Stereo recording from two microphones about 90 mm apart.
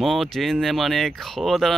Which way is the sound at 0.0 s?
Centre (ahead or behind).